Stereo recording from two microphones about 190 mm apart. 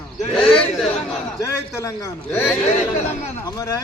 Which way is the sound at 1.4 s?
15° left (ahead or behind).